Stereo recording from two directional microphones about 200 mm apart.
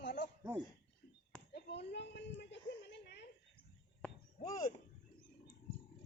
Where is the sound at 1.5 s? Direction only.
55° left (ahead or behind).